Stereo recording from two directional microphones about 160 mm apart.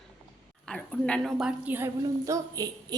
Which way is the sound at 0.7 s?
5° left (ahead or behind).